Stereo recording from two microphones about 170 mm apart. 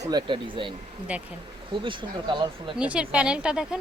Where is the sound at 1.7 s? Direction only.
30° right (ahead or behind).